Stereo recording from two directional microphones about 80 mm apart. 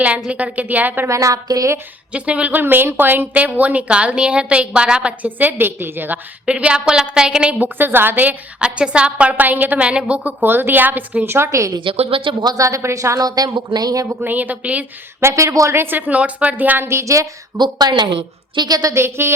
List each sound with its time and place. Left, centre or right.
0.3 s a woman's voice: centre
1.0 s a woman's voice: right
2.1 s a woman's voice: centre
6.4 s a woman's voice: centre
7.8 s a woman's voice: right
10.4 s a woman's voice: right
11.8 s speech: right
12.5 s a woman's voice: right
14.1 s a woman's voice: right
15.2 s a woman's voice: right
17.6 s a woman's voice: right
18.9 s a woman's voice: right